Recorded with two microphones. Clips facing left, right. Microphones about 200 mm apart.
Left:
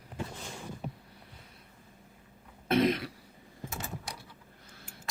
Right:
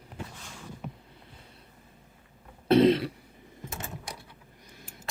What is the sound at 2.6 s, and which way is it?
Throat clearing, 30° right (ahead or behind).